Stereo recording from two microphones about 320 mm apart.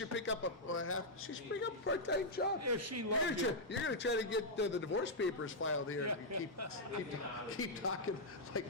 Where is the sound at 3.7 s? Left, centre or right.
Left.